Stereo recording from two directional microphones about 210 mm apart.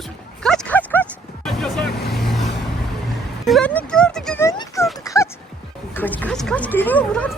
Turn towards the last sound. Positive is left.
turn(degrees=5)  # may be behind; listen again after turning